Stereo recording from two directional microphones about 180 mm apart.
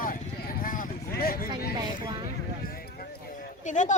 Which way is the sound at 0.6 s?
50° left (ahead or behind).